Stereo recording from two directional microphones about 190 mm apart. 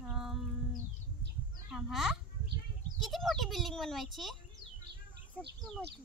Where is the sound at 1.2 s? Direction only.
65° right (ahead or behind).